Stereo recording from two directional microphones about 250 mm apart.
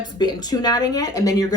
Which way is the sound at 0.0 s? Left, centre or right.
Centre.